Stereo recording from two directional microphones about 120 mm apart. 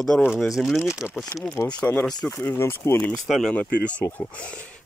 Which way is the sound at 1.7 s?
10° left (ahead or behind).